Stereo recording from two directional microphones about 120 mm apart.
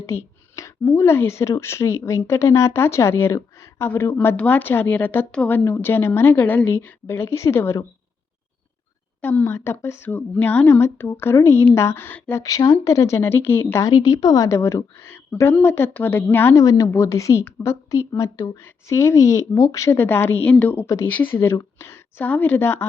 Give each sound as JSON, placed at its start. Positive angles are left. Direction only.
{"t": 0.0, "sound": "speech", "side_deg": 20}
{"t": 9.2, "sound": "speech", "side_deg": 20}
{"t": 13.9, "sound": "a woman's voice", "side_deg": 35}
{"t": 20.8, "sound": "speech", "side_deg": 25}
{"t": 21.1, "sound": "speech", "side_deg": 15}